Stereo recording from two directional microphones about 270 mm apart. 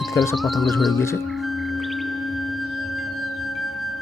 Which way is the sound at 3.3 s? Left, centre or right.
Left.